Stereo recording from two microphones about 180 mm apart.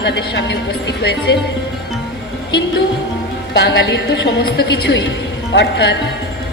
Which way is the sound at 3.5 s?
70° left (ahead or behind).